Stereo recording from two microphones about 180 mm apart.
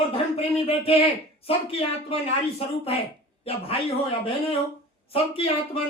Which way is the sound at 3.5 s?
30° left (ahead or behind).